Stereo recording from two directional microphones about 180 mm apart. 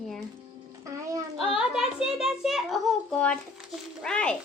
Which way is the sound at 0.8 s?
20° right (ahead or behind).